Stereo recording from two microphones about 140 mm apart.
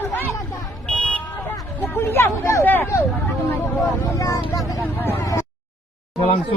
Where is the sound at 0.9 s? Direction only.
5° left (ahead or behind).